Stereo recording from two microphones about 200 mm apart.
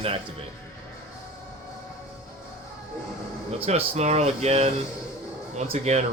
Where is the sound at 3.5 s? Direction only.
30° right (ahead or behind).